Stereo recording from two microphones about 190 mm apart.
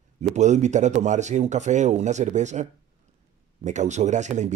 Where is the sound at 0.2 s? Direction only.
40° right (ahead or behind).